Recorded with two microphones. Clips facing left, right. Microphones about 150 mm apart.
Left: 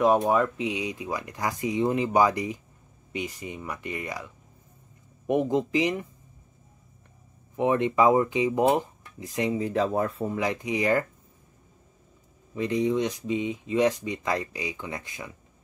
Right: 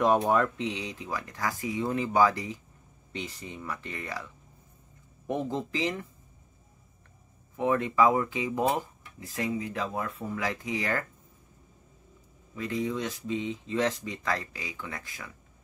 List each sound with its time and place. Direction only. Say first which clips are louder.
0.3 s speech: left 2 dB; 5° left (ahead or behind)
7.5 s speech: left 3 dB; 20° left (ahead or behind)
9.6 s speech: left 8 dB; 35° left (ahead or behind)
12.5 s speech: left 6 dB; 20° left (ahead or behind)